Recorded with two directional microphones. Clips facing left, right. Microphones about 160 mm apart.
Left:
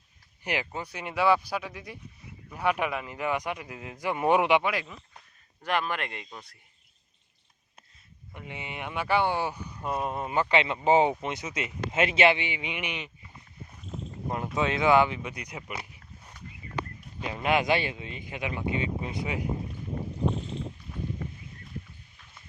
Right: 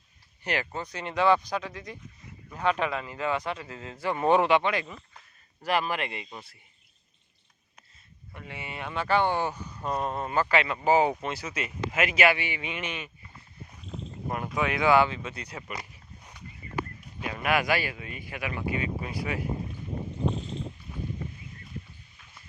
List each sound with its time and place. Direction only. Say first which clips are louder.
0.4 s a man's voice: right 1 dB; 15° left (ahead or behind)
4.7 s speech: right 2 dB; centre (ahead or behind)
8.3 s a man's voice: even; 20° left (ahead or behind)
14.5 s a man's voice: even; 20° left (ahead or behind)
17.2 s speech: left 1 dB; 25° left (ahead or behind)